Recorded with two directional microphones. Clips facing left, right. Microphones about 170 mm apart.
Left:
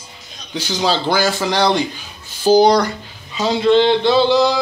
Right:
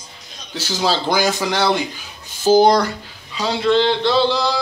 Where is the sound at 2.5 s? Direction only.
5° right (ahead or behind).